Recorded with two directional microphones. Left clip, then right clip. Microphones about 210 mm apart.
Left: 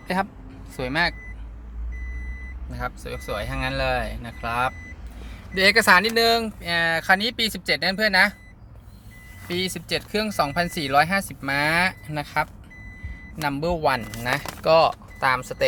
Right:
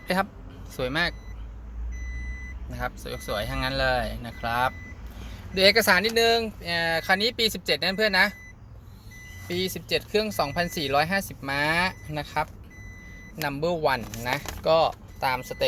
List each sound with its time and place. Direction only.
0.1 s speech: 5° right (ahead or behind)
2.6 s speech: 5° right (ahead or behind)
5.5 s speech: 5° left (ahead or behind)
9.5 s speech: 5° left (ahead or behind)